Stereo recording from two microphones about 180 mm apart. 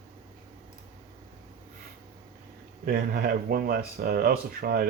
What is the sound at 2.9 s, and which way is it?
Speech, 55° right (ahead or behind).